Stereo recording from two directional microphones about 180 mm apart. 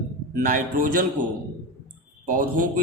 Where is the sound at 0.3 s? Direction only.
50° right (ahead or behind).